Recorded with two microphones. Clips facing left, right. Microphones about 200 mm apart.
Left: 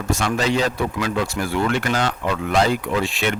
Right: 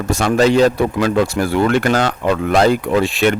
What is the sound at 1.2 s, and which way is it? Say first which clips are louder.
Speech: right 6 dB; 35° right (ahead or behind).